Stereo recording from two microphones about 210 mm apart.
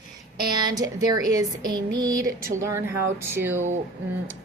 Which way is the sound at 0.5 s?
15° right (ahead or behind).